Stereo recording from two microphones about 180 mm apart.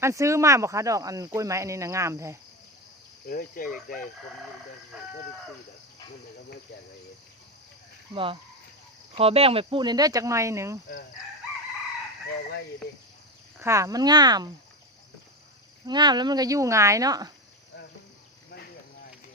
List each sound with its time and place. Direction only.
0.0 s speech: 15° right (ahead or behind)
3.2 s cricket: 50° left (ahead or behind)
8.1 s speech: 30° right (ahead or behind)
13.6 s speech: 15° right (ahead or behind)
15.9 s speech: 25° right (ahead or behind)